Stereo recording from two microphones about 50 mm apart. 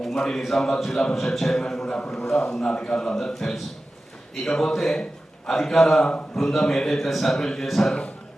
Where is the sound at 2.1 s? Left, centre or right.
Centre.